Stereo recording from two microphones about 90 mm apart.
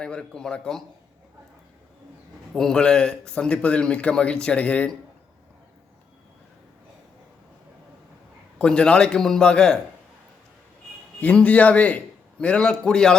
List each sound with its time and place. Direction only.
0.0 s speech: 10° left (ahead or behind)
2.5 s speech: 5° left (ahead or behind)
8.5 s speech: 10° left (ahead or behind)
11.2 s speech: 15° left (ahead or behind)